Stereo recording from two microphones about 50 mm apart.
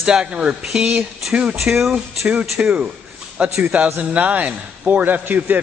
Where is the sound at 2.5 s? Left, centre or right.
Right.